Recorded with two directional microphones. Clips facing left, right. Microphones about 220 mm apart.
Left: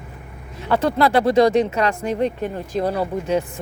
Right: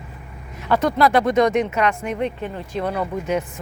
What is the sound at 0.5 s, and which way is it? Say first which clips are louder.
Speech: even; 30° left (ahead or behind).